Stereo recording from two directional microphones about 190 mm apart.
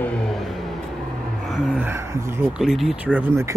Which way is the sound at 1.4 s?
Centre (ahead or behind).